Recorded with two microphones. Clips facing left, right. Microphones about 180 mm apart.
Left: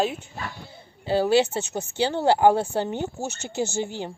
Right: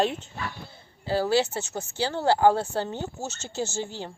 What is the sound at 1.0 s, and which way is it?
A woman's voice, 20° left (ahead or behind).